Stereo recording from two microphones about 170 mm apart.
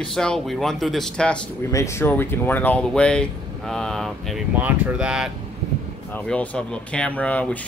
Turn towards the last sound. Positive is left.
turn(degrees=10)  # may be behind; listen again after turning